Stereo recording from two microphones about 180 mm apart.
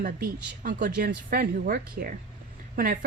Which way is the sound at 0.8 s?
55° right (ahead or behind).